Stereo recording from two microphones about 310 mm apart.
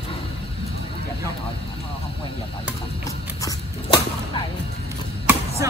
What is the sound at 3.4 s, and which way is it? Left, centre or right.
Whip, centre.